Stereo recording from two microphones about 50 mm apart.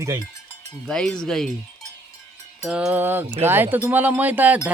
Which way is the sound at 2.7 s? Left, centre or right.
Right.